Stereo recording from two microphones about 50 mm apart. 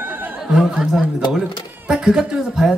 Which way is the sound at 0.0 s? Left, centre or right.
Right.